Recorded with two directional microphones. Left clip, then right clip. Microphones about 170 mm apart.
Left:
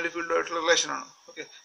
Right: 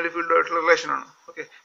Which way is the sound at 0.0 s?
35° left (ahead or behind).